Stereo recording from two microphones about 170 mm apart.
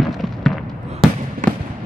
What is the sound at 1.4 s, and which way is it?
Fireworks, 50° right (ahead or behind).